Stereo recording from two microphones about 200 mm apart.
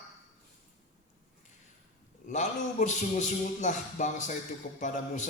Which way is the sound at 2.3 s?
35° left (ahead or behind).